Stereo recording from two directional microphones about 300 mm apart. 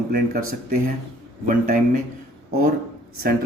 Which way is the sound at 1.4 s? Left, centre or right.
Right.